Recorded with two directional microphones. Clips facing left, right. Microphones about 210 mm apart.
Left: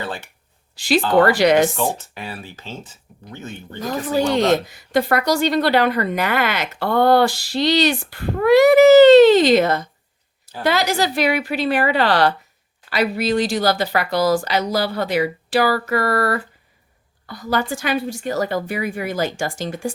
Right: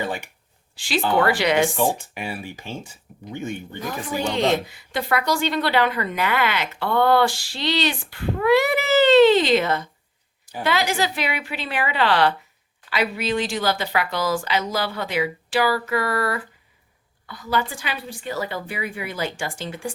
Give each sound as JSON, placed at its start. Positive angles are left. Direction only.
{"t": 0.0, "sound": "speech", "side_deg": -15}
{"t": 0.8, "sound": "speech", "side_deg": 40}
{"t": 1.7, "sound": "speech", "side_deg": -10}
{"t": 4.4, "sound": "a woman's voice", "side_deg": 40}